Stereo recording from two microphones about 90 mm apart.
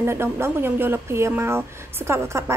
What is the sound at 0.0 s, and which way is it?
Speech, 30° right (ahead or behind).